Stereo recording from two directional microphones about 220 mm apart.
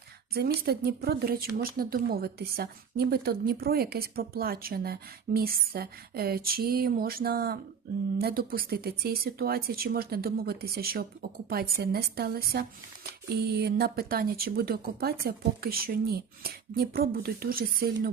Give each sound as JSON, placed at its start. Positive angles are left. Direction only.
{"t": 0.3, "sound": "a woman's voice", "side_deg": -45}